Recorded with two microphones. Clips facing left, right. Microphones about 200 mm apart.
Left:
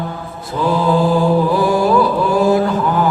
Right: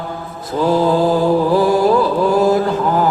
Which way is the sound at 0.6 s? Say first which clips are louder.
Right 1 dB; 40° right (ahead or behind).